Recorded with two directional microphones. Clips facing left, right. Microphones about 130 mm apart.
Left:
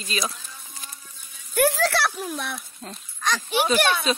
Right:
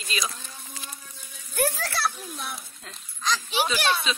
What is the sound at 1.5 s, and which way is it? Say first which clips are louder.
Speech: left 7 dB; 85° left.